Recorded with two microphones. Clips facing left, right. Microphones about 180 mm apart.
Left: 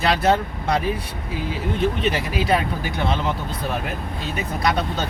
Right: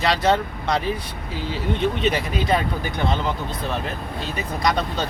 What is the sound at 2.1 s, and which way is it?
Speech, 5° left (ahead or behind).